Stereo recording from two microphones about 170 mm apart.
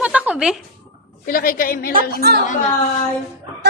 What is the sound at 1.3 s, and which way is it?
Speech, 55° left (ahead or behind).